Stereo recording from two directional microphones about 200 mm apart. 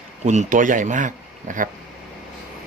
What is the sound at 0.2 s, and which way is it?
Speech, 35° right (ahead or behind).